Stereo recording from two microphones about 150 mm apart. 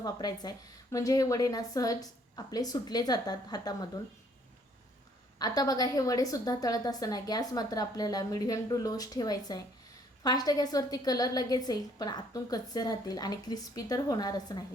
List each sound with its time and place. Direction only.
0.0 s a woman's voice: 25° left (ahead or behind)
5.4 s a woman's voice: 25° left (ahead or behind)